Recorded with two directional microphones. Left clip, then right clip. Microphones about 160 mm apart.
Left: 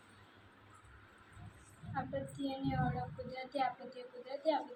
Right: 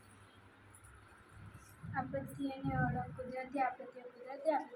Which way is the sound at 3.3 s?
Centre (ahead or behind).